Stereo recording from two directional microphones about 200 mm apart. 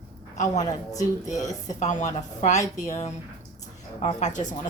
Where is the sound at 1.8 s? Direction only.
35° left (ahead or behind).